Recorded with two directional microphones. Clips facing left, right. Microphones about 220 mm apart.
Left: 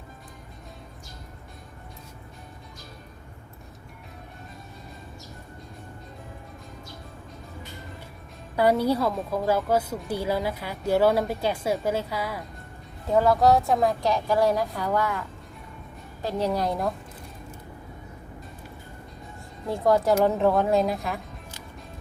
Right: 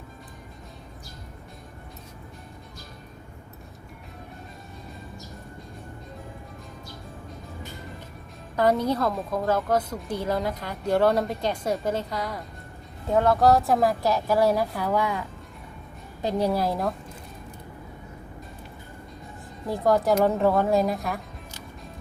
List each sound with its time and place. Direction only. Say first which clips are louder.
8.5 s a woman's voice: left 1 dB; 10° left (ahead or behind); by 15.2 s 10° right (ahead or behind)
16.2 s a woman's voice: right 2 dB; 10° right (ahead or behind)
19.6 s a woman's voice: even; centre (ahead or behind)